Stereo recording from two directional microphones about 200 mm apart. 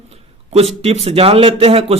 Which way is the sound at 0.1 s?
30° right (ahead or behind).